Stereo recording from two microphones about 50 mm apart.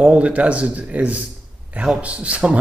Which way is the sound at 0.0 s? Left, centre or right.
Right.